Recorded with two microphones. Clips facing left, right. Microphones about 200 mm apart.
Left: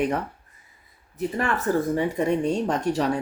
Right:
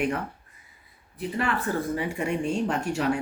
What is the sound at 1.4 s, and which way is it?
A woman's voice, 45° left (ahead or behind).